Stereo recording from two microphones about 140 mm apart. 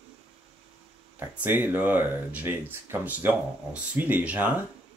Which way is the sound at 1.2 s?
15° right (ahead or behind).